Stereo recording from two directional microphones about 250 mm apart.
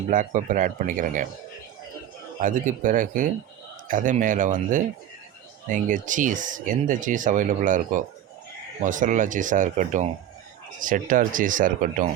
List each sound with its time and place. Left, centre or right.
0.1 s speech: right
2.4 s speech: right